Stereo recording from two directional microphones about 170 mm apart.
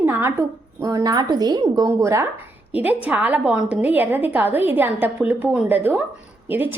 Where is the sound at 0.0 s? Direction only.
15° right (ahead or behind).